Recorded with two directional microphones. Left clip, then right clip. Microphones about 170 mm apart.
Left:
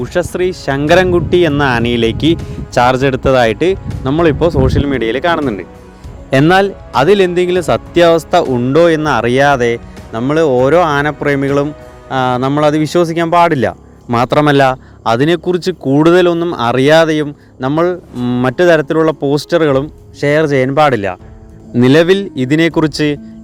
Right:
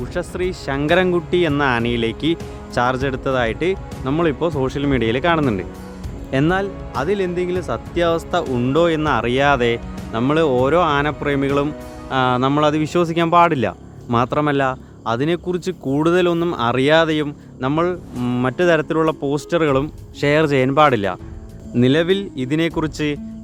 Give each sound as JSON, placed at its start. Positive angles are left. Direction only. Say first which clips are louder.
{"t": 0.0, "sound": "a man's voice", "louder": "left 9 dB", "side_deg": 40}
{"t": 6.5, "sound": "speech", "louder": "left 11 dB", "side_deg": 50}
{"t": 8.5, "sound": "a man's voice", "louder": "left 7 dB", "side_deg": 25}
{"t": 19.8, "sound": "speech", "louder": "left 5 dB", "side_deg": 15}
{"t": 21.8, "sound": "a man's voice", "louder": "left 8 dB", "side_deg": 35}